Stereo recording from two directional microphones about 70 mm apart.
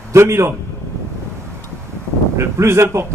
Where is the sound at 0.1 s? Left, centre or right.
Right.